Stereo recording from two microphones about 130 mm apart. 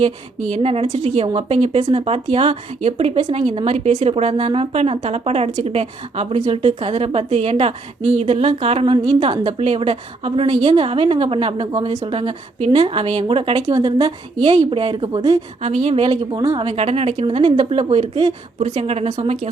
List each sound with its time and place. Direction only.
0.5 s a woman's voice: 50° right (ahead or behind)
13.7 s a woman's voice: 30° right (ahead or behind)
14.4 s a woman's voice: 50° right (ahead or behind)
15.3 s a woman's voice: 55° right (ahead or behind)
16.3 s speech: 25° right (ahead or behind)
16.6 s a woman's voice: 50° right (ahead or behind)
18.6 s speech: 60° right (ahead or behind)